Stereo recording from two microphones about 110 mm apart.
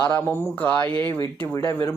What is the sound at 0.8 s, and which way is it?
Speech, 50° right (ahead or behind).